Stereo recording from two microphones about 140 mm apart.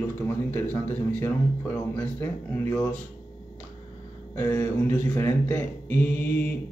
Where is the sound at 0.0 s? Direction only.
15° left (ahead or behind).